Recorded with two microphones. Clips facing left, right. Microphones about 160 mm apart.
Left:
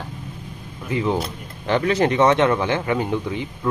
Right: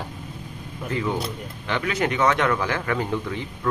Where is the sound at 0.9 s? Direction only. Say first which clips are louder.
Left 4 dB; 25° left (ahead or behind).